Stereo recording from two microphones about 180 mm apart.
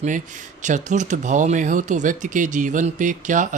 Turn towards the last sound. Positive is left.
turn(degrees=-45)  # may be behind; listen again after turning